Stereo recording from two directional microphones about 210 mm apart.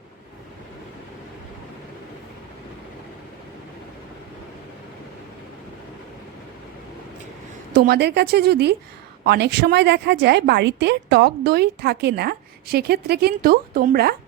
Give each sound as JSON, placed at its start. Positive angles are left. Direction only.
{"t": 7.7, "sound": "a woman's voice", "side_deg": -45}